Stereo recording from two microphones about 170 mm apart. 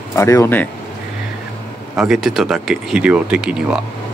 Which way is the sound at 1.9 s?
Centre (ahead or behind).